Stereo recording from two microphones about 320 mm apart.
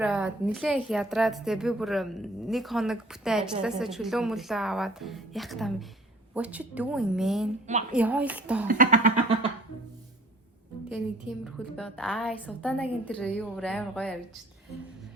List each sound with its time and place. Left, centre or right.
0.0 s a woman's voice: centre
8.6 s a sound: right
10.9 s a woman's voice: centre